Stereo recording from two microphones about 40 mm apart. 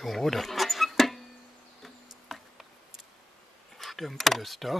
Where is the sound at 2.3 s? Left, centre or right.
Centre.